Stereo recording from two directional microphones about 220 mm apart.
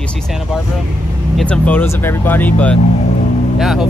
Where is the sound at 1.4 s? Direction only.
5° left (ahead or behind).